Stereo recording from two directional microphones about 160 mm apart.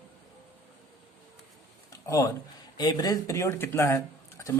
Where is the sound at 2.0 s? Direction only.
20° left (ahead or behind).